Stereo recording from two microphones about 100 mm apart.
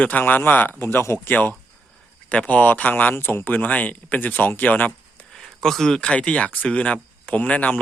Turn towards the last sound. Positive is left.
turn(degrees=10)  # may be behind; listen again after turning